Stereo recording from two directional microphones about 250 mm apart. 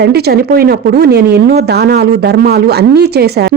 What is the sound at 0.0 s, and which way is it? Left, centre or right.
A woman's voice, right.